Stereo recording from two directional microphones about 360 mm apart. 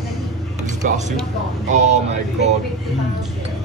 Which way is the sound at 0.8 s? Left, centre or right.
Centre.